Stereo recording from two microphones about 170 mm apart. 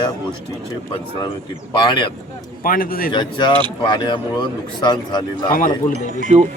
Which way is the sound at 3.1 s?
30° left (ahead or behind).